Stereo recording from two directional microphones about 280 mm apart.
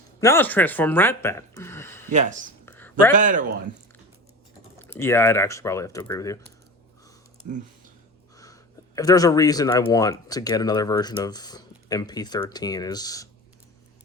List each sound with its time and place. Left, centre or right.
0.2 s speech: centre
2.0 s speech: right
2.6 s a sound: centre
3.1 s speech: right
4.8 s speech: centre
9.0 s speech: centre